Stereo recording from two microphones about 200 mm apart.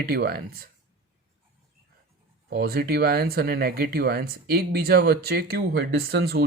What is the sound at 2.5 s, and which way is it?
Speech, 50° right (ahead or behind).